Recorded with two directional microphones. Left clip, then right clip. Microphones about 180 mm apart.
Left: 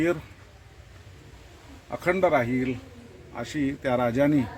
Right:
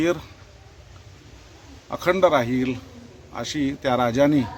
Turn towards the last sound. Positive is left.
turn(degrees=-10)  # may be behind; listen again after turning